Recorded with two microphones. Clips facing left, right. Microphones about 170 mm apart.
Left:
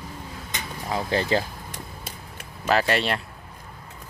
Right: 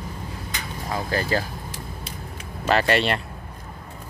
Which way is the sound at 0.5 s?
20° left (ahead or behind).